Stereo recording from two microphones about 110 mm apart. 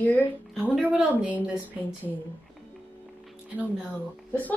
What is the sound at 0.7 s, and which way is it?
Speech, 15° right (ahead or behind).